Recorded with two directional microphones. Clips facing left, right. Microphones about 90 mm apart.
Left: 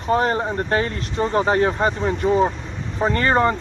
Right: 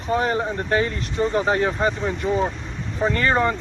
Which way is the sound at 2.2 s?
15° left (ahead or behind).